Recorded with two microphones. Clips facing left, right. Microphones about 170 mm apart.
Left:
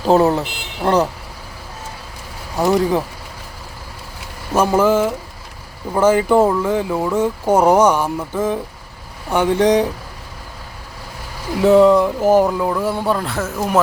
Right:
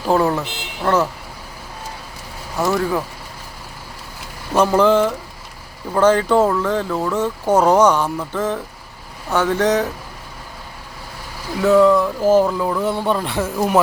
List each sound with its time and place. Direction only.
0.0 s speech: 20° left (ahead or behind)
2.6 s speech: 15° left (ahead or behind)
4.5 s speech: 10° left (ahead or behind)
11.6 s a man's voice: 20° left (ahead or behind); by 13.8 s 5° right (ahead or behind)